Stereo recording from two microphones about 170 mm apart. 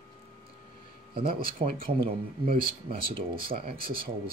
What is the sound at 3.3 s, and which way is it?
Speech, 60° right (ahead or behind).